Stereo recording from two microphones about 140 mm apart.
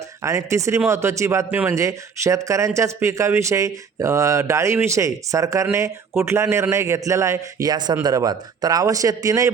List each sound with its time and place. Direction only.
0.2 s speech: 20° right (ahead or behind)